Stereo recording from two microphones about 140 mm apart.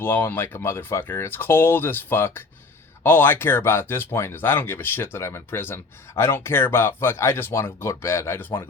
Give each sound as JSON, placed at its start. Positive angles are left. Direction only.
{"t": 0.0, "sound": "speech", "side_deg": 15}